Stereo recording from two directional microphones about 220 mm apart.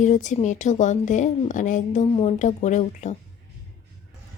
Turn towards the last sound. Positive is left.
turn(degrees=30)  # may be behind; listen again after turning